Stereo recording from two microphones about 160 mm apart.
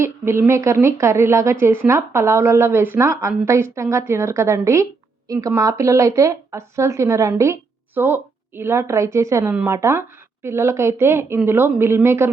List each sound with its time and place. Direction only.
0.0 s a woman's voice: 15° right (ahead or behind)